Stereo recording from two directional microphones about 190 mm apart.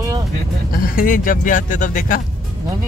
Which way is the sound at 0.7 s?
50° left (ahead or behind).